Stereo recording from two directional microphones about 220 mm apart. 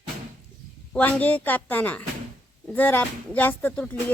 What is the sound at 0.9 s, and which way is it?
A woman's voice, 5° left (ahead or behind).